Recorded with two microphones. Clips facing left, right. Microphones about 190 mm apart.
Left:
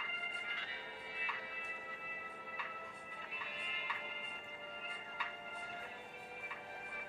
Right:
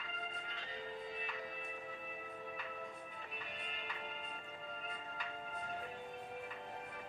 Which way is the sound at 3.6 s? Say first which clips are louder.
Right 2 dB; 45° right (ahead or behind).